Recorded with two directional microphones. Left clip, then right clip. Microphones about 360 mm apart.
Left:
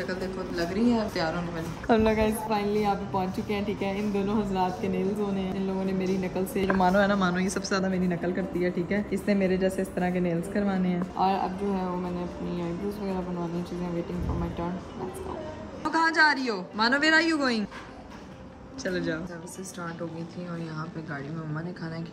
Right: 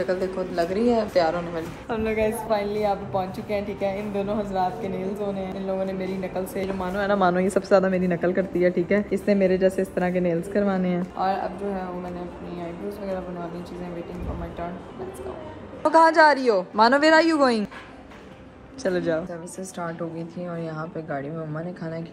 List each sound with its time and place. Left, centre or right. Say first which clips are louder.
0.0 s a woman's voice: right 7 dB; centre
1.9 s a woman's voice: left 5 dB; left
2.1 s speech: right 3 dB; centre
15.8 s speech: right 7 dB; centre
20.6 s speech: right 6 dB; centre